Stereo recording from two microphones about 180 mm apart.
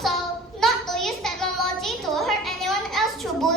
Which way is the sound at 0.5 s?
Centre (ahead or behind).